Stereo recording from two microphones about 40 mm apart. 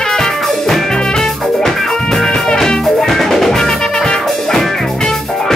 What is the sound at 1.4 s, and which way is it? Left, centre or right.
Music, centre.